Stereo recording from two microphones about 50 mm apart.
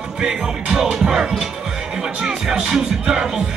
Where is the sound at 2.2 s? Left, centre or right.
Centre.